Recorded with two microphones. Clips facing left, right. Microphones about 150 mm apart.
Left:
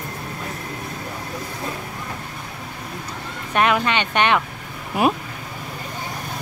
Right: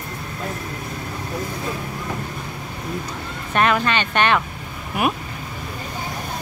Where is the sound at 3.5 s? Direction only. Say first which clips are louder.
Even; 10° left (ahead or behind).